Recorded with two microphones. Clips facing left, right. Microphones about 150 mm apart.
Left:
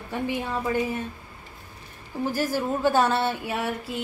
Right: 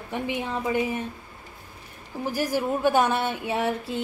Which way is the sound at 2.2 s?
15° right (ahead or behind).